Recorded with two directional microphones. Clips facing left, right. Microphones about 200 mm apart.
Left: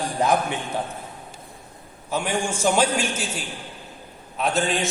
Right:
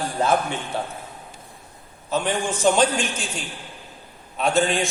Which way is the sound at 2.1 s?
10° left (ahead or behind).